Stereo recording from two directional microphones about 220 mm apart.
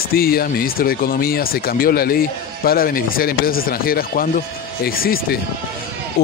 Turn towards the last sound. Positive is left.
turn(degrees=40)  # may be behind; listen again after turning